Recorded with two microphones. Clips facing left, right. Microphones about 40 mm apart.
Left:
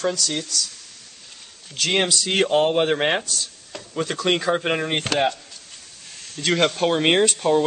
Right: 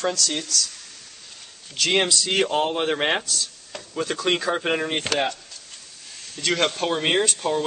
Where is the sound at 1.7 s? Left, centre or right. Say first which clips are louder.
Even; centre.